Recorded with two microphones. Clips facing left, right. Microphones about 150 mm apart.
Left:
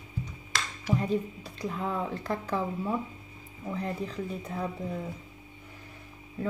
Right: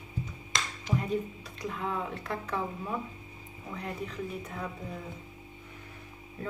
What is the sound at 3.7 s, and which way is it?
Speech, 35° left (ahead or behind).